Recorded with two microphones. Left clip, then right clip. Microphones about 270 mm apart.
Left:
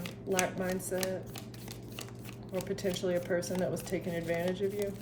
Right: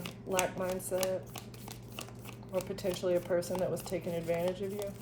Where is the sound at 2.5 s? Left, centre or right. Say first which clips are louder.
Even; centre.